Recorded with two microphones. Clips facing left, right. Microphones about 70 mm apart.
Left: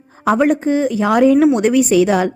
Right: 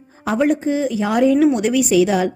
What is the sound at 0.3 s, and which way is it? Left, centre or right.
A woman's voice, left.